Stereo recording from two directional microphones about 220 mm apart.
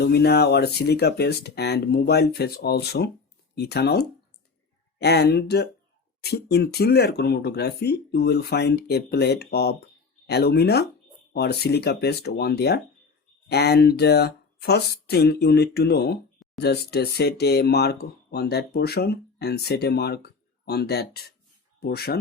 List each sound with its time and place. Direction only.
0.0 s speech: 45° left (ahead or behind)